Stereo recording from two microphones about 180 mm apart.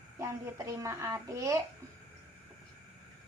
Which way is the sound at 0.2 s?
15° right (ahead or behind).